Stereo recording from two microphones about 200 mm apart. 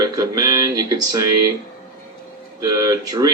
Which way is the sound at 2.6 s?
15° right (ahead or behind).